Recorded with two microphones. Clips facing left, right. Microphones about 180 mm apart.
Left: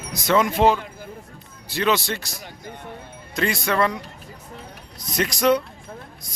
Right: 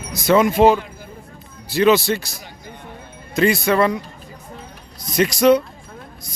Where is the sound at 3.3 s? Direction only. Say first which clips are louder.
Right 6 dB; 5° right (ahead or behind).